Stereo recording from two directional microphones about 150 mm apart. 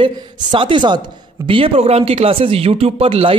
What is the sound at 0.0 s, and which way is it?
Speech, 35° right (ahead or behind).